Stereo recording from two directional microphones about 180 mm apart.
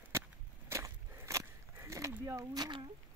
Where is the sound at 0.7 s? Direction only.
15° right (ahead or behind).